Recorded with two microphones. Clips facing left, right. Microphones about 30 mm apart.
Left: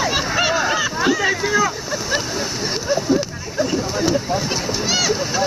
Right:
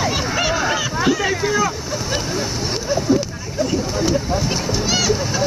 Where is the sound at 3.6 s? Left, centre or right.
Centre.